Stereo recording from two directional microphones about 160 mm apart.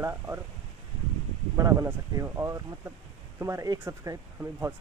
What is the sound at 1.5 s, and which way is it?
Speech, 20° right (ahead or behind).